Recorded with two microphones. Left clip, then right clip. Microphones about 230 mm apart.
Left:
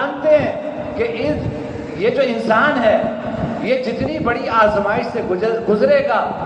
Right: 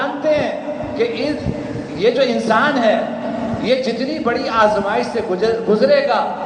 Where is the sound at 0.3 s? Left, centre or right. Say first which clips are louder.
Left 4 dB; centre.